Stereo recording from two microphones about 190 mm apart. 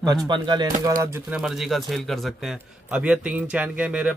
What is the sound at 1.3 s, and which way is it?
A man's voice, 5° right (ahead or behind).